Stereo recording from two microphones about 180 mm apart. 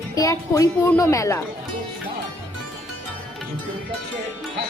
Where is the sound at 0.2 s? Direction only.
20° left (ahead or behind).